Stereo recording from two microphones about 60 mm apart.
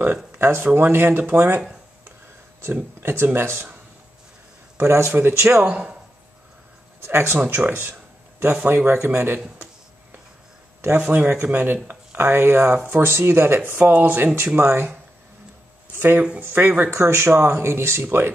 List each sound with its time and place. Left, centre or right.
0.0 s speech: right
3.0 s speech: right
4.7 s speech: right
5.7 s speech: right
7.1 s speech: right
11.0 s speech: right
12.2 s speech: right
13.7 s speech: right
14.6 s speech: right
16.2 s speech: right
16.4 s speech: right
16.9 s speech: right